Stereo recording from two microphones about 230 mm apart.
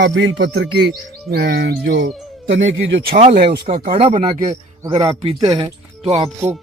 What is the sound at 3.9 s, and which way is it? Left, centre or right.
Speech, right.